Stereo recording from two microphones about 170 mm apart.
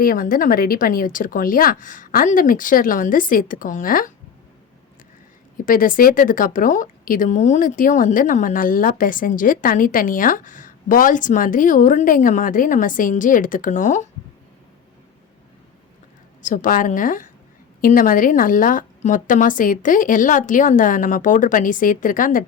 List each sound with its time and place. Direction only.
0.0 s speech: 55° left (ahead or behind)
5.6 s speech: 55° left (ahead or behind)
16.4 s speech: 50° left (ahead or behind)